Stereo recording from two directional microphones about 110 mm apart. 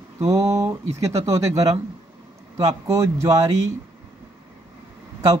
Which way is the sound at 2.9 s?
25° right (ahead or behind).